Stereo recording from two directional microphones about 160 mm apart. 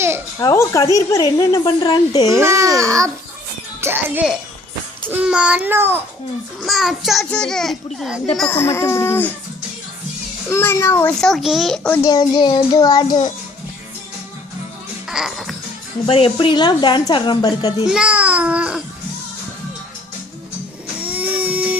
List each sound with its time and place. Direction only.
0.3 s a woman's voice: 15° left (ahead or behind)
2.3 s a child's voice: 15° right (ahead or behind)
6.7 s a child's voice: centre (ahead or behind)
8.4 s speech: 15° left (ahead or behind)
10.5 s speech: 15° left (ahead or behind)
11.2 s a child's voice: centre (ahead or behind)
12.0 s a woman's voice: 25° left (ahead or behind)
15.1 s music: centre (ahead or behind)
16.0 s a woman's voice: 35° left (ahead or behind)
17.8 s a child's voice: 5° right (ahead or behind)
21.0 s a sound: 10° right (ahead or behind)